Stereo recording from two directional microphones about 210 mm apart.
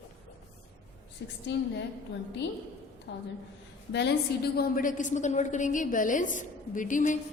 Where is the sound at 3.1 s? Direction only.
55° left (ahead or behind).